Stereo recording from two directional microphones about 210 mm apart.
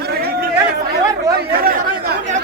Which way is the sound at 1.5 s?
45° right (ahead or behind).